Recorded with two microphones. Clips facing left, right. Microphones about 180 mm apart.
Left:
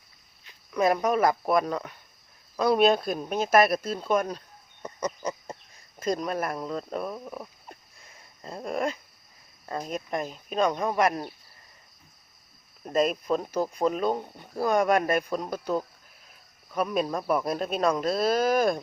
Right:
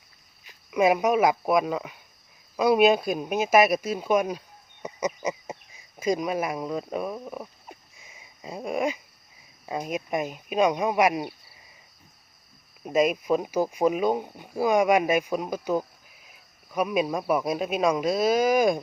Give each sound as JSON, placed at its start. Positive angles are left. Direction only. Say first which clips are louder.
{"t": 0.7, "sound": "speech", "louder": "right 3 dB", "side_deg": -10}
{"t": 12.8, "sound": "speech", "louder": "right 2 dB", "side_deg": -5}